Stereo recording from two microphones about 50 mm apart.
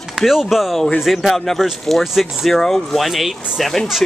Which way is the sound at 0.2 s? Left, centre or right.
Centre.